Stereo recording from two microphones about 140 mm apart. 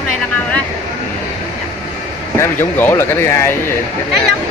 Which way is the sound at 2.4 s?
15° left (ahead or behind).